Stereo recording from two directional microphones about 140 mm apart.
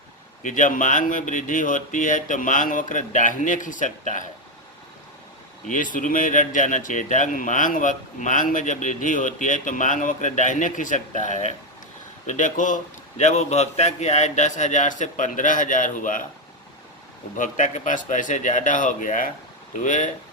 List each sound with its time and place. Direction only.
0.4 s speech: 65° left (ahead or behind)
5.6 s speech: 70° left (ahead or behind)
17.3 s speech: 65° left (ahead or behind)